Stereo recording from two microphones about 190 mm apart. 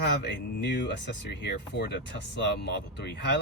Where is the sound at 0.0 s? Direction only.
65° left (ahead or behind).